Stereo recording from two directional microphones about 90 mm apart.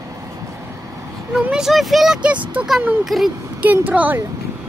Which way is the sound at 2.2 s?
15° right (ahead or behind).